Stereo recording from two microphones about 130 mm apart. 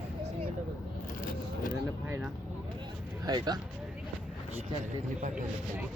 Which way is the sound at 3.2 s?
30° right (ahead or behind).